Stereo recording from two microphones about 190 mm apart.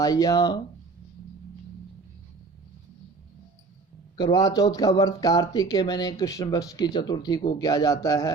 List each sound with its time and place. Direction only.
0.0 s speech: 20° left (ahead or behind)
4.2 s speech: 15° left (ahead or behind)